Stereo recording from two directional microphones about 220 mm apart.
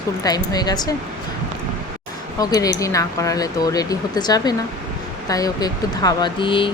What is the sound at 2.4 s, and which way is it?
Speech, 15° left (ahead or behind).